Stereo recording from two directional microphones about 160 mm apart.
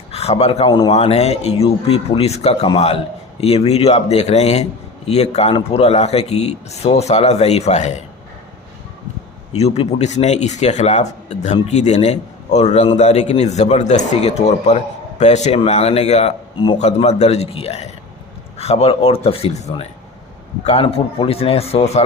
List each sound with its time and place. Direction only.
0.1 s speech: 40° left (ahead or behind)
0.7 s a man's voice: 25° left (ahead or behind)
0.9 s speech: 40° left (ahead or behind)
9.6 s speech: 40° left (ahead or behind)